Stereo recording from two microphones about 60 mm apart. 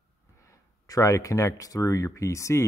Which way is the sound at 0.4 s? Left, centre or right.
Left.